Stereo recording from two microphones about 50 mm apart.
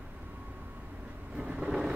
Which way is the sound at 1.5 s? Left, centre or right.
Centre.